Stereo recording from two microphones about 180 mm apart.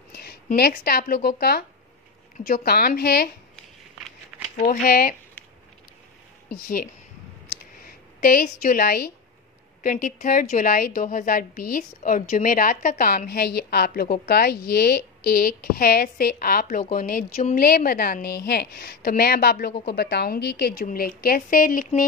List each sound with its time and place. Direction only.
0.1 s a sound: 60° left (ahead or behind)
0.6 s a woman's voice: 55° left (ahead or behind)
4.8 s a woman's voice: 55° left (ahead or behind)
6.5 s a woman's voice: 55° left (ahead or behind)